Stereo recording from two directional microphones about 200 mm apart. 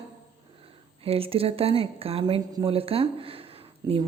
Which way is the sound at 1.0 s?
30° right (ahead or behind).